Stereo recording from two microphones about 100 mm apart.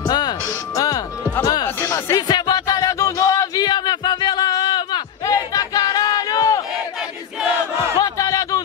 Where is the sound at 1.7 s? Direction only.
25° left (ahead or behind).